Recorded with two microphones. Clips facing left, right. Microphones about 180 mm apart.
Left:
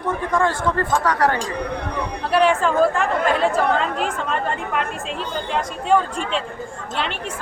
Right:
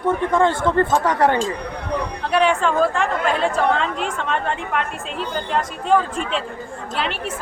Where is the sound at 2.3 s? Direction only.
Centre (ahead or behind).